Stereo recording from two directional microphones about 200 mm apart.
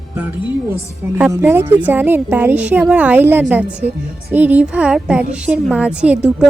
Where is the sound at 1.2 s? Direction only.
10° right (ahead or behind).